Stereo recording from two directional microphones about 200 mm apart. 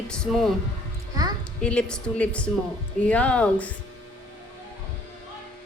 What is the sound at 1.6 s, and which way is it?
A woman's voice, 5° left (ahead or behind).